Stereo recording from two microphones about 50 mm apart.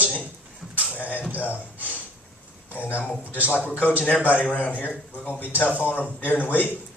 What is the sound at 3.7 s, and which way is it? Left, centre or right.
Speech, left.